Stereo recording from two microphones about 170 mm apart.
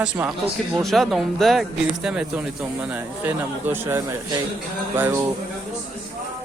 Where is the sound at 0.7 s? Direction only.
Centre (ahead or behind).